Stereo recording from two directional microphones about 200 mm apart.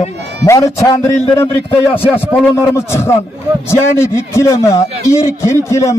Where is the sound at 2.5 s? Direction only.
15° left (ahead or behind).